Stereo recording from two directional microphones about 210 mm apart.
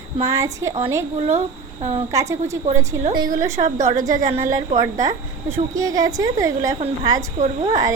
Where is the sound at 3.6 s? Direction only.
35° right (ahead or behind).